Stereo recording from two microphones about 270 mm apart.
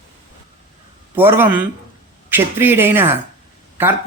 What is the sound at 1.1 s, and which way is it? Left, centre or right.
A man's voice, centre.